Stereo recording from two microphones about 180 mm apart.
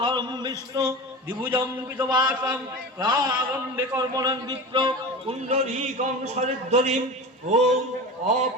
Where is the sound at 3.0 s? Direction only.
25° right (ahead or behind); by 7.0 s 40° right (ahead or behind).